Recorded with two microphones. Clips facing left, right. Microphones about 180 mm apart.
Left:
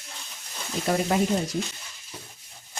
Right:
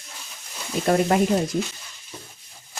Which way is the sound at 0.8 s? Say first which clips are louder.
Right 5 dB; 60° right (ahead or behind).